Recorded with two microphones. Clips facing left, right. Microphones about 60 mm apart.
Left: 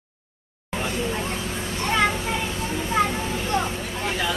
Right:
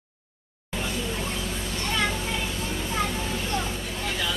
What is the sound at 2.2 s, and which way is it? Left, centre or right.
Children playing, left.